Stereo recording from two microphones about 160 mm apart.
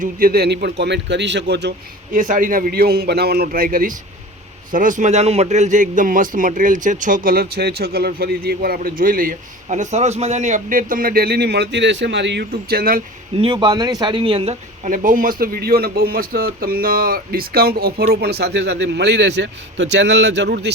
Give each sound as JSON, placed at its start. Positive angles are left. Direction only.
{"t": 0.0, "sound": "speech", "side_deg": -65}
{"t": 2.1, "sound": "a man's voice", "side_deg": -55}
{"t": 13.4, "sound": "speech", "side_deg": -30}
{"t": 14.8, "sound": "a man's voice", "side_deg": -55}